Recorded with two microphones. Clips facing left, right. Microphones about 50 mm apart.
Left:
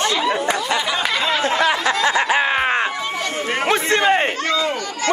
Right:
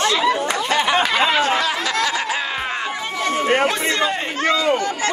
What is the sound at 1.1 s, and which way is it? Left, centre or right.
Speech, right.